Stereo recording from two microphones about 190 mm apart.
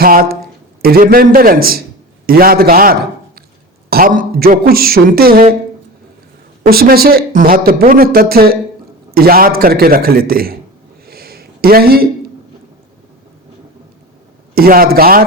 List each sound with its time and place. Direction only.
0.0 s a man's voice: 50° right (ahead or behind)
6.7 s speech: 50° right (ahead or behind)
11.0 s a sound: 55° right (ahead or behind)
14.5 s speech: 50° right (ahead or behind)